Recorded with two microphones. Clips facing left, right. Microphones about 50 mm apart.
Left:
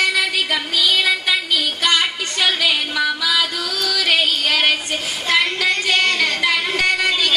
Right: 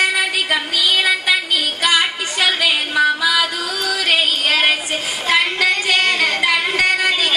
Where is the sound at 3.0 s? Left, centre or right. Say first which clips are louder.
Right 7 dB; right.